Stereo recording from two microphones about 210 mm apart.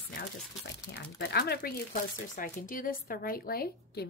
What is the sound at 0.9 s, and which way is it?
Speech, 50° left (ahead or behind).